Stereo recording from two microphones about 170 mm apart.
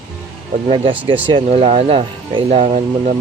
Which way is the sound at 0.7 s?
30° right (ahead or behind).